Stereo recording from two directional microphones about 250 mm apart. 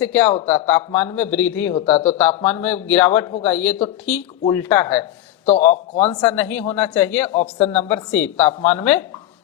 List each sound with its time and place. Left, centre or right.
0.0 s speech: centre